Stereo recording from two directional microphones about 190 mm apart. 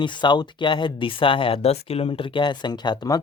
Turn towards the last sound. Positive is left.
turn(degrees=20)  # may be behind; listen again after turning